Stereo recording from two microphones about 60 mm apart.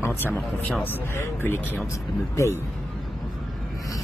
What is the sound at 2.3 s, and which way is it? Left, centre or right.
Speech, left.